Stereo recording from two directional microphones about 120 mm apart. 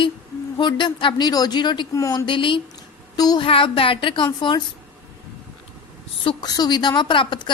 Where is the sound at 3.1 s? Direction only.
35° left (ahead or behind).